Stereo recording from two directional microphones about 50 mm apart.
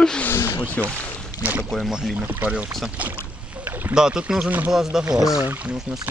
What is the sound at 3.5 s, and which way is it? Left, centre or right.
Boat, right.